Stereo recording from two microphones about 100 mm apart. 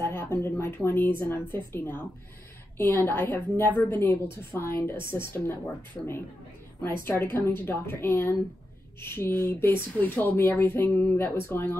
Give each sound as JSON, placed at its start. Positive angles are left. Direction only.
{"t": 0.0, "sound": "speech", "side_deg": 25}
{"t": 6.8, "sound": "speech", "side_deg": 20}